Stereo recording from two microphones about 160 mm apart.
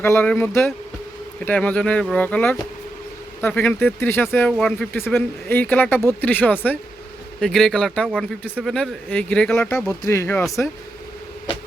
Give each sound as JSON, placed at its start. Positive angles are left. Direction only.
{"t": 0.0, "sound": "speech", "side_deg": 10}
{"t": 4.9, "sound": "speech", "side_deg": 15}